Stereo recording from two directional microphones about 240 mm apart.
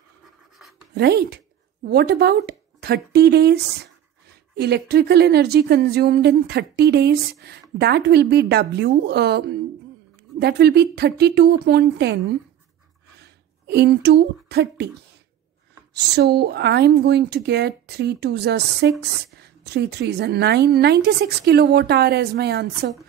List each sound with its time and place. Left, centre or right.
0.2 s writing: centre
0.9 s a woman's voice: right
4.6 s speech: right
13.7 s speech: right
15.9 s speech: right